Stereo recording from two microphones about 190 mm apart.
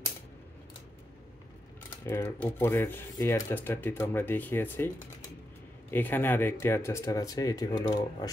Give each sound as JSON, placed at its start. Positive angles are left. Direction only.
{"t": 2.0, "sound": "speech", "side_deg": 10}